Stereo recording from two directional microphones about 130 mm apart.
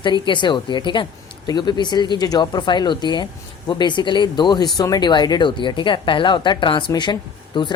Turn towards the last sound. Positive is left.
turn(degrees=35)  # may be behind; listen again after turning